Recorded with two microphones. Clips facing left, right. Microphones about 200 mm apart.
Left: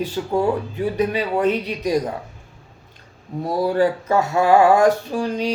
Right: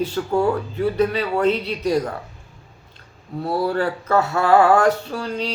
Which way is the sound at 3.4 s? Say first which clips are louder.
Left 3 dB; 15° left (ahead or behind).